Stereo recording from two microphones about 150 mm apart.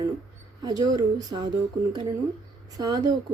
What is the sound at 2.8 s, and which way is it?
Speech, 25° right (ahead or behind).